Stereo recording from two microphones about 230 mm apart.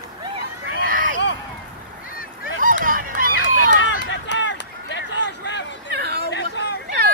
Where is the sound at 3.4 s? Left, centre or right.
Left.